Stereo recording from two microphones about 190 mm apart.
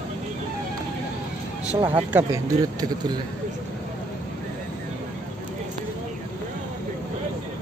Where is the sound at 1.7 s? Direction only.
30° right (ahead or behind).